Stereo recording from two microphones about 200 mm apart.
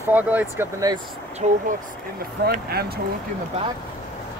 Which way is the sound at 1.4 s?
35° right (ahead or behind).